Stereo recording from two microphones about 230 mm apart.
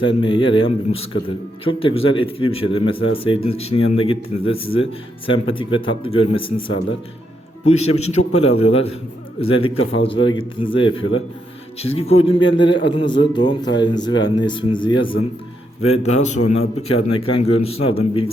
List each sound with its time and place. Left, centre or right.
0.0 s speech: left
17.4 s speech: left